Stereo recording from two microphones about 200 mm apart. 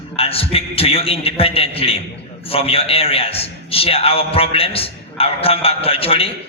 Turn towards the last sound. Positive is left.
turn(degrees=30)  # may be behind; listen again after turning